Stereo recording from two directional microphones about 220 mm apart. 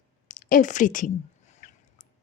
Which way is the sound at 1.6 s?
35° left (ahead or behind).